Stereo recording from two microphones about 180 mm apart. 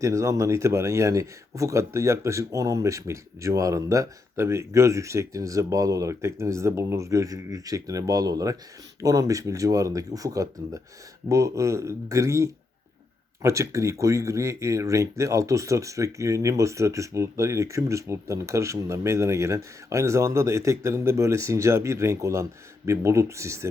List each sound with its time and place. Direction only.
0.0 s speech: 15° right (ahead or behind)